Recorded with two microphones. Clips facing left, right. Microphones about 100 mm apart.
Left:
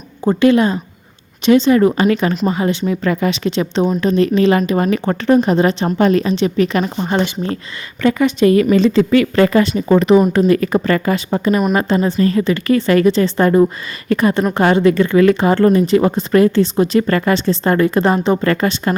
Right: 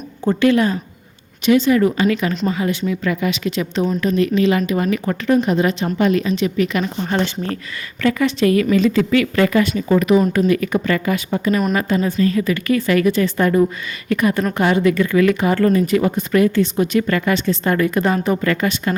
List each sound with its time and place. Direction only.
0.3 s speech: 20° left (ahead or behind)
7.1 s speech: 25° left (ahead or behind)